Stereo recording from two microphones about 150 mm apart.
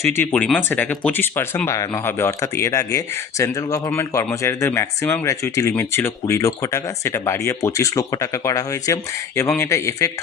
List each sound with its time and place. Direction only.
0.2 s speech: 10° left (ahead or behind)